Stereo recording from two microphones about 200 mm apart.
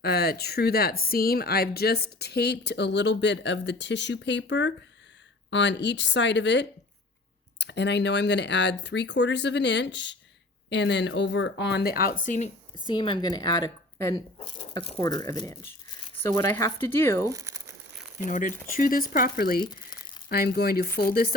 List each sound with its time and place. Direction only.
0.0 s speech: 50° left (ahead or behind)
12.2 s speech: 40° left (ahead or behind)
12.7 s speech: 25° left (ahead or behind)
17.2 s speech: 15° right (ahead or behind)
18.3 s speech: 40° left (ahead or behind)
19.5 s speech: 20° left (ahead or behind)
20.3 s speech: 50° left (ahead or behind)